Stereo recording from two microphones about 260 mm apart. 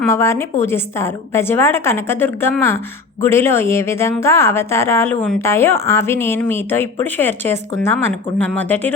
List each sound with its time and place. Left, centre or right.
0.1 s a woman's voice: centre